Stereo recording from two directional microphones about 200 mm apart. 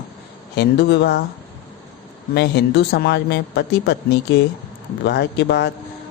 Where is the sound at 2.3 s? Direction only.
55° left (ahead or behind).